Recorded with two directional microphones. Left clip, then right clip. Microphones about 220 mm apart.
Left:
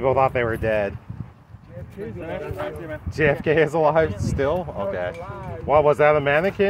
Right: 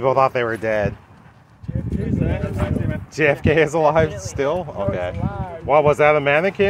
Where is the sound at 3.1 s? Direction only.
10° right (ahead or behind).